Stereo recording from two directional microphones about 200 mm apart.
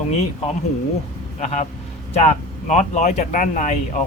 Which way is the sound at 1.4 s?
35° left (ahead or behind).